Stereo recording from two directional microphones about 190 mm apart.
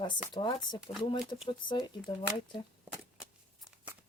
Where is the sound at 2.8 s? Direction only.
10° right (ahead or behind).